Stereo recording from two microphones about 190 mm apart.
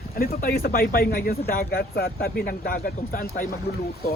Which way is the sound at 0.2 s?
50° left (ahead or behind).